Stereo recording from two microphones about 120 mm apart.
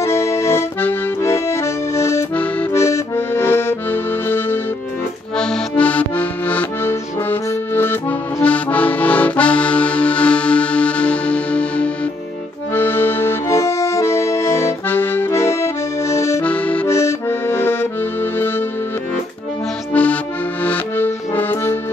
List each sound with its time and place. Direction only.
0.0 s accordion: 25° left (ahead or behind)
16.4 s accordion: 10° left (ahead or behind)
16.8 s accordion: 20° left (ahead or behind)
19.9 s music: 10° left (ahead or behind)
20.6 s accordion: 15° left (ahead or behind)